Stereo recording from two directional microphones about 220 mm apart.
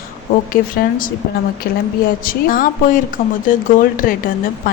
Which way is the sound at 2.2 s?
40° left (ahead or behind).